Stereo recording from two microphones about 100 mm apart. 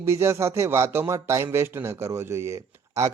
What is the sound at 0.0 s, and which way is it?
A man's voice, 25° right (ahead or behind).